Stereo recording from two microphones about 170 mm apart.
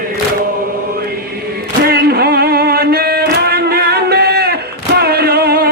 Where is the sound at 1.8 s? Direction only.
65° right (ahead or behind).